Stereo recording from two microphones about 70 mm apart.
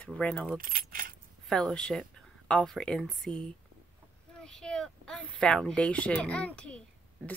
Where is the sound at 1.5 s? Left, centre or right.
Centre.